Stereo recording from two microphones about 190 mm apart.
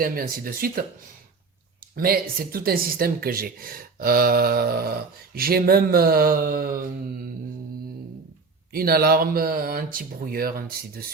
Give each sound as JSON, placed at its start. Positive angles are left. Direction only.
{"t": 0.0, "sound": "speech", "side_deg": -50}
{"t": 2.0, "sound": "speech", "side_deg": -50}
{"t": 8.7, "sound": "speech", "side_deg": -50}